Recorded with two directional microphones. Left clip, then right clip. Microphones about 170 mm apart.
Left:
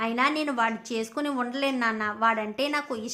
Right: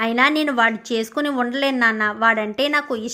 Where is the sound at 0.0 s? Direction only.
30° right (ahead or behind).